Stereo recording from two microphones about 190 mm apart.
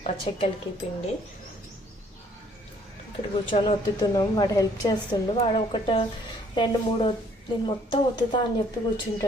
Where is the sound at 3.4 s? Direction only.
25° left (ahead or behind).